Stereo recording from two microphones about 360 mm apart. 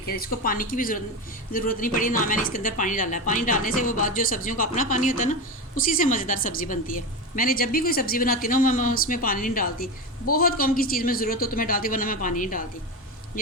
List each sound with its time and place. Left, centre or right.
0.2 s speech: left